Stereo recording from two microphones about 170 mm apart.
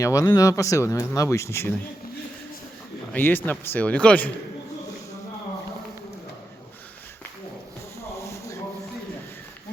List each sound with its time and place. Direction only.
0.0 s speech: 20° left (ahead or behind)
3.1 s speech: 10° left (ahead or behind)
8.2 s a sound: 15° left (ahead or behind)